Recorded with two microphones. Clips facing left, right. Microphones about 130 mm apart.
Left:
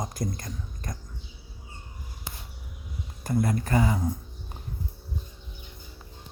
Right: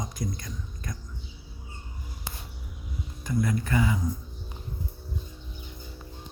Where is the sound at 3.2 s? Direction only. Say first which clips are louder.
Left 1 dB; 40° left (ahead or behind).